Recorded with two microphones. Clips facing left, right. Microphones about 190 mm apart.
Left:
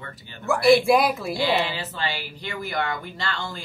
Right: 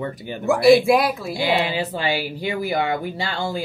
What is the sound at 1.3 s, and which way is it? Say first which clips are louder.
Speech: right 3 dB; 15° right (ahead or behind).